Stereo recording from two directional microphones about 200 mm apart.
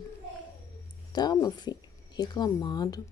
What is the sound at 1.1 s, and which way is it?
Speech, 20° left (ahead or behind).